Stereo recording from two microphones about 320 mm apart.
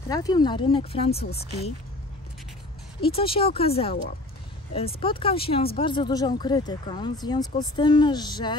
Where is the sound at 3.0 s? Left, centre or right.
Centre.